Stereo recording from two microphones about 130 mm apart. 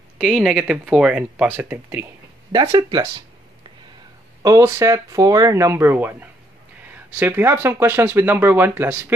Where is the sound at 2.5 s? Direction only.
30° right (ahead or behind).